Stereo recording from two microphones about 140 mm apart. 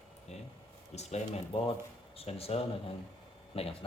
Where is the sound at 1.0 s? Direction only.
50° left (ahead or behind).